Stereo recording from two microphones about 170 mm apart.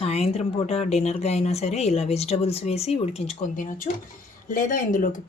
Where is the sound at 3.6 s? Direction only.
50° left (ahead or behind).